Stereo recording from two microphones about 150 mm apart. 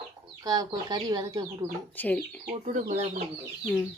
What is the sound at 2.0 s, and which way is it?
Speech, 10° left (ahead or behind).